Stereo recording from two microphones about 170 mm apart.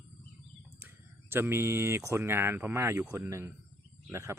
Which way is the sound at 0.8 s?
10° right (ahead or behind).